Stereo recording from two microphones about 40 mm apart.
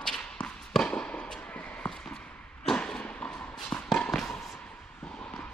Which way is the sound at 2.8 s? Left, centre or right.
Left.